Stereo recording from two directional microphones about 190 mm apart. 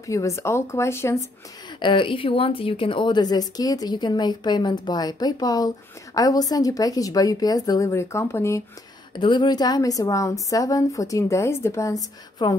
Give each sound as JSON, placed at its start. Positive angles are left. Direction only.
{"t": 0.0, "sound": "a woman's voice", "side_deg": 15}
{"t": 1.8, "sound": "a woman's voice", "side_deg": 25}